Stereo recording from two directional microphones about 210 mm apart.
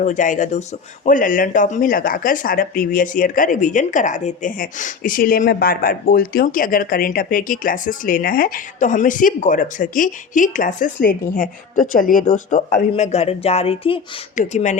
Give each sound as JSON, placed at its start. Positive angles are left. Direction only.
{"t": 0.0, "sound": "speech", "side_deg": 35}